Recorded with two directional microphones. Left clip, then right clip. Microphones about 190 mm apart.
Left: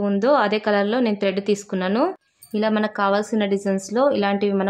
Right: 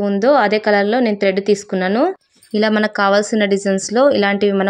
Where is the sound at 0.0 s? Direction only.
15° right (ahead or behind).